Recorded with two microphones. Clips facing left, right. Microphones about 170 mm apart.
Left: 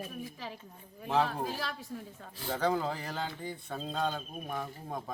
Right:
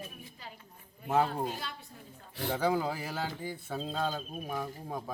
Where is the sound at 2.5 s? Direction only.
10° right (ahead or behind).